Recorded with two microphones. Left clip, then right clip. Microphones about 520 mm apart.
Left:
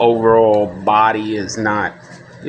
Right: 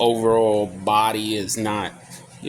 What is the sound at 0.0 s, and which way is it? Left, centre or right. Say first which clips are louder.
Speech: left 6 dB; right.